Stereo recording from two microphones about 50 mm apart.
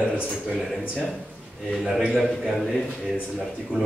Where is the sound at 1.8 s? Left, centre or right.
Centre.